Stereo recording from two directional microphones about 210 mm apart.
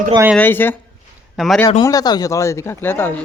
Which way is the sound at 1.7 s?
20° left (ahead or behind).